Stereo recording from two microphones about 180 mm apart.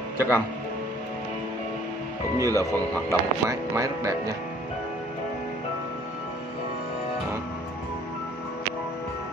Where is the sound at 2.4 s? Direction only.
15° right (ahead or behind).